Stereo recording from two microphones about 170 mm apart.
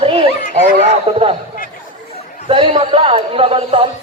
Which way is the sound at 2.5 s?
35° right (ahead or behind).